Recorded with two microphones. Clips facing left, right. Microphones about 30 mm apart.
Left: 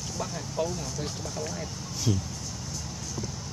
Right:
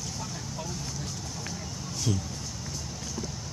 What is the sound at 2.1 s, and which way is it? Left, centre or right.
Speech, centre.